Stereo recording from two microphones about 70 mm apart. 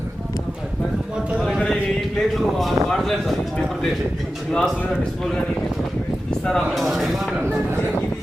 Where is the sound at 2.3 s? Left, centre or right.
Centre.